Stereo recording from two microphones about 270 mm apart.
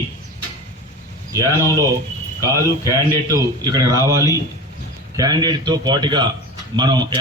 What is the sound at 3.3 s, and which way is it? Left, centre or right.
A man's voice, centre.